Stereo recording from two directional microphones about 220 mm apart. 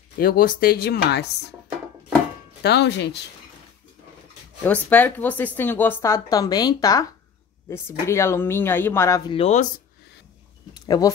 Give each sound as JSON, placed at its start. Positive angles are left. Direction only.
{"t": 0.2, "sound": "speech", "side_deg": 40}
{"t": 2.6, "sound": "speech", "side_deg": 50}
{"t": 4.6, "sound": "a woman's voice", "side_deg": 5}
{"t": 8.1, "sound": "a woman's voice", "side_deg": 10}
{"t": 9.3, "sound": "speech", "side_deg": 30}
{"t": 10.7, "sound": "a sound", "side_deg": 15}